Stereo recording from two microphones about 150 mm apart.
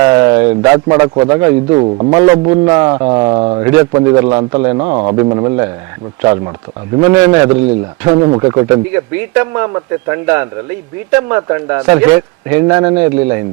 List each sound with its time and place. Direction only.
0.0 s speech: 25° right (ahead or behind)
0.9 s speech: 25° right (ahead or behind)
3.6 s speech: 15° right (ahead or behind)
3.9 s speech: 30° right (ahead or behind)
7.0 s speech: 15° right (ahead or behind)
8.9 s speech: 15° right (ahead or behind)